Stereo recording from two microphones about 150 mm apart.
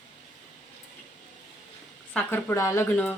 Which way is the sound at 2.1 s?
10° left (ahead or behind).